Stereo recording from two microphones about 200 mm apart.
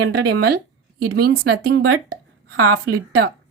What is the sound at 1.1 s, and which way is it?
Speech, 55° right (ahead or behind).